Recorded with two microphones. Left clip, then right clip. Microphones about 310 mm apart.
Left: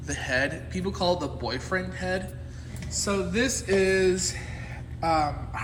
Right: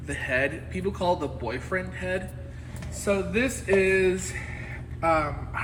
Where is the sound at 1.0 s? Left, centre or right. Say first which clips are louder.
Left 1 dB; centre.